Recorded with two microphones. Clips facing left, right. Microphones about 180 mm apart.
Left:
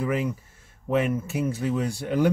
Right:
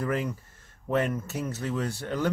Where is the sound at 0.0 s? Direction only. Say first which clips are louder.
Left 3 dB; 5° left (ahead or behind).